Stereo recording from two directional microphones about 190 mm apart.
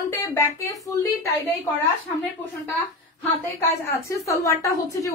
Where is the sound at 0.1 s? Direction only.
15° left (ahead or behind).